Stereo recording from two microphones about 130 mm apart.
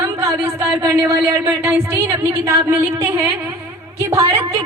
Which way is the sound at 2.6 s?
20° right (ahead or behind).